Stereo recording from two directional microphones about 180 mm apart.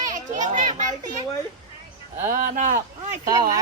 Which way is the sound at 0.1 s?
45° right (ahead or behind).